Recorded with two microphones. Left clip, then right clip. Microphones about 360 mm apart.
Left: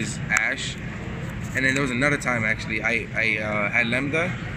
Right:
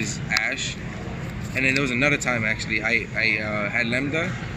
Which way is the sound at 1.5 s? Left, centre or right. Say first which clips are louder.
Right 1 dB; centre.